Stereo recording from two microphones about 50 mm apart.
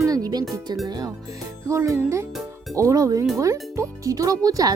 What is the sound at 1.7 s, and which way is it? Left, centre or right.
Speech, right.